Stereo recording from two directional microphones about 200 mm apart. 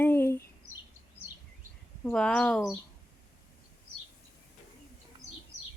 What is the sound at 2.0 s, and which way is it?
Speech, 5° left (ahead or behind).